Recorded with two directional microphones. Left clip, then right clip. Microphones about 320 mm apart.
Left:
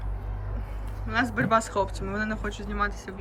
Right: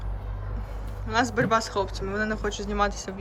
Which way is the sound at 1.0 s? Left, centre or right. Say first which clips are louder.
Right 2 dB; centre.